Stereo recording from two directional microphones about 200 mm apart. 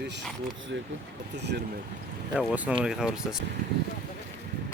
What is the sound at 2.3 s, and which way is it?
Speech, 5° right (ahead or behind).